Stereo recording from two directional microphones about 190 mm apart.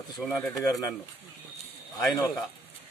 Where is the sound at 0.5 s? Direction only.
20° left (ahead or behind).